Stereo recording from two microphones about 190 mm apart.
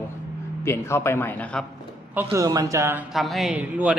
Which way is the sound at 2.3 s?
20° right (ahead or behind).